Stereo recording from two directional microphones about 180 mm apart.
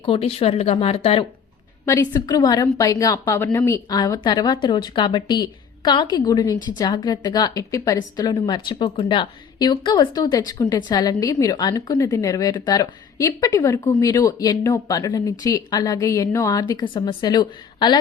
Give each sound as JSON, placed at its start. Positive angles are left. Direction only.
{"t": 0.0, "sound": "speech", "side_deg": 30}
{"t": 1.8, "sound": "a woman's voice", "side_deg": 20}